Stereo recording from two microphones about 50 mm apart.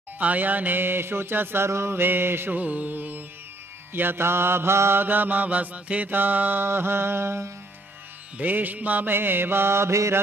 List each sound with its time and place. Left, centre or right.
0.2 s music: right
2.5 s mantra: right
3.9 s music: right
5.0 s mantra: right
8.4 s music: right